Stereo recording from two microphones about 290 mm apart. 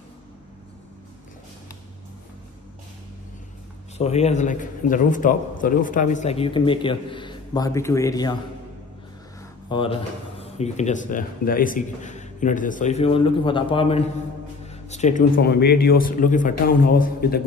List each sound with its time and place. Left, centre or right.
4.0 s a man's voice: left
9.7 s a man's voice: centre